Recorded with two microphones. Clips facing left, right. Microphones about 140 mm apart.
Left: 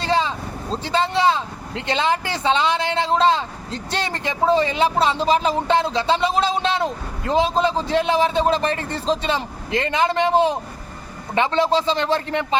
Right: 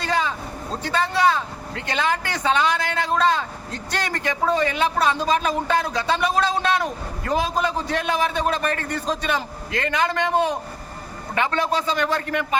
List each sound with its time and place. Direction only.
0.0 s speech: 25° left (ahead or behind)